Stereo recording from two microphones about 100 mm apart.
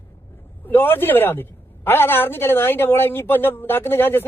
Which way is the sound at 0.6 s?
20° left (ahead or behind).